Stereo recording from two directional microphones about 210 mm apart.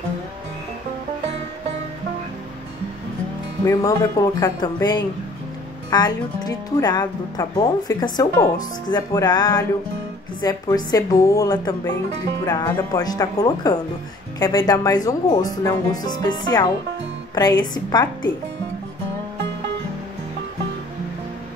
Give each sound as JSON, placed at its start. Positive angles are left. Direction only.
{"t": 3.6, "sound": "a woman's voice", "side_deg": 15}